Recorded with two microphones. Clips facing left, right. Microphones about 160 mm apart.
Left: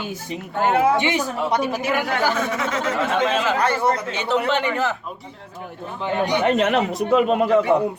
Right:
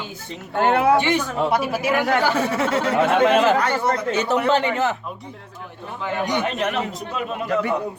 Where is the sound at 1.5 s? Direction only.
5° right (ahead or behind).